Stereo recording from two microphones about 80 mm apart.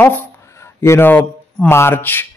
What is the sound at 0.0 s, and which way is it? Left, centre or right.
Speech, left.